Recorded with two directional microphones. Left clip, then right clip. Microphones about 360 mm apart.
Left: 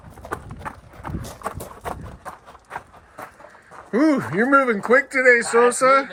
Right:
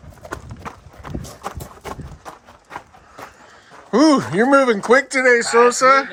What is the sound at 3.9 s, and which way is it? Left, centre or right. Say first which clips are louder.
Speech: right 5 dB; centre.